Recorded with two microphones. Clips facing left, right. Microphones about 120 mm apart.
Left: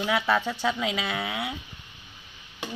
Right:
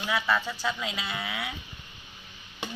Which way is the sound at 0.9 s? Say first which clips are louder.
Left 5 dB; 60° left (ahead or behind).